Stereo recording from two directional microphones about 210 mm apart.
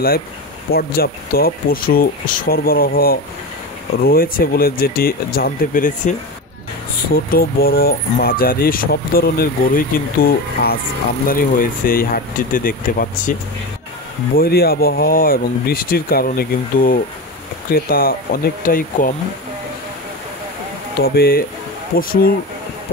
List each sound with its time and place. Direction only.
0.7 s speech: 45° left (ahead or behind)
7.2 s speech: 45° left (ahead or behind)
21.0 s speech: 45° left (ahead or behind)